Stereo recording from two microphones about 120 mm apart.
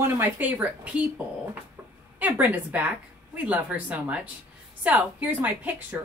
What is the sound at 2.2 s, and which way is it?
Speech, 15° right (ahead or behind).